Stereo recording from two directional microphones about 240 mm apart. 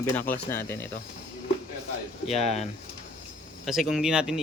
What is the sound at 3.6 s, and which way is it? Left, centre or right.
Speech, centre.